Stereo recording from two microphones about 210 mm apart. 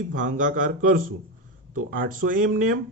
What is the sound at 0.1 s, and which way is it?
Speech, 40° right (ahead or behind).